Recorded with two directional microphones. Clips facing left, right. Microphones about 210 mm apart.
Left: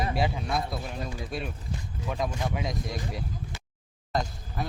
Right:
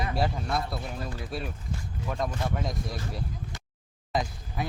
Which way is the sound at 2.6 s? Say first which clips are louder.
Left 1 dB; centre (ahead or behind).